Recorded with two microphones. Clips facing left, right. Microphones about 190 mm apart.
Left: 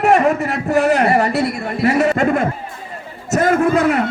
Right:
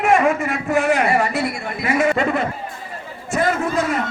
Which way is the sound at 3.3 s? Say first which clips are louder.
Left 6 dB; 45° left (ahead or behind).